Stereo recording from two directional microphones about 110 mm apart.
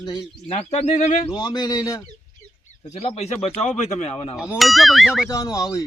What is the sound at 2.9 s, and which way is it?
Speech, 75° left (ahead or behind).